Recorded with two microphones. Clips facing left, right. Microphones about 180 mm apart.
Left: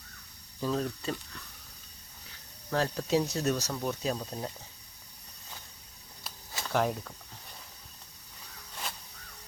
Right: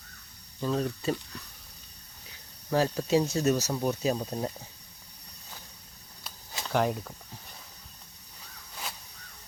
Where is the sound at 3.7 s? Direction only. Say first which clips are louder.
Right 4 dB; 15° right (ahead or behind).